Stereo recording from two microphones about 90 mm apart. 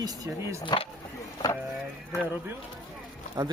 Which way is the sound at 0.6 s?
65° left (ahead or behind).